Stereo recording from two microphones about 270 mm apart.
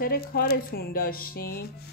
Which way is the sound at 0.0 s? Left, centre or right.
Left.